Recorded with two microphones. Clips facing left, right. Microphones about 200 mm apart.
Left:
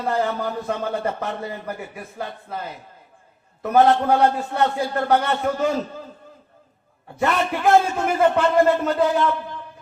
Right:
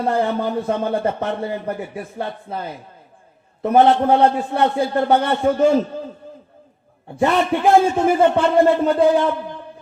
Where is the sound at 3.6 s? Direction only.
30° right (ahead or behind).